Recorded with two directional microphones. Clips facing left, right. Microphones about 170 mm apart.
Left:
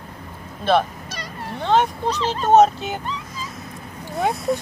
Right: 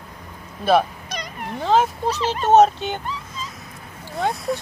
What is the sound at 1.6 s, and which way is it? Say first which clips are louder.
Speech: even; 5° right (ahead or behind).